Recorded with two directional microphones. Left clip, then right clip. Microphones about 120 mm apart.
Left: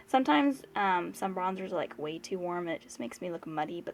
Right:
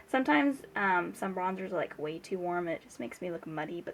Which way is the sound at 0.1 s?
30° left (ahead or behind).